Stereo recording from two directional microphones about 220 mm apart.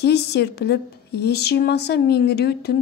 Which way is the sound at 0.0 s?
50° left (ahead or behind).